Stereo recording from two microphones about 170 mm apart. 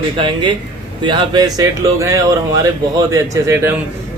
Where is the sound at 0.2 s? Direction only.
30° right (ahead or behind).